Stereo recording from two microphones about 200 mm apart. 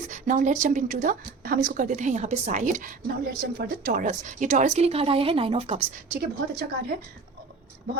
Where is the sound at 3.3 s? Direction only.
50° right (ahead or behind); by 5.8 s 30° right (ahead or behind).